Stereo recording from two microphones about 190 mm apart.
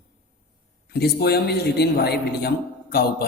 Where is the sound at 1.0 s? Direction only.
60° left (ahead or behind).